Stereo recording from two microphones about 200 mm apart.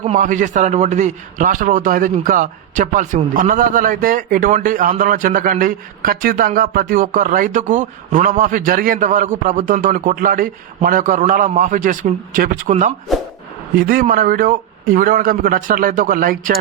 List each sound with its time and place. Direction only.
0.0 s a man's voice: 35° right (ahead or behind)
13.1 s speech: centre (ahead or behind)
13.7 s a man's voice: 45° right (ahead or behind)